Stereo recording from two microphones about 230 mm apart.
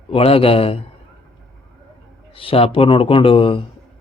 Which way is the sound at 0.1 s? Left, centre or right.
Left.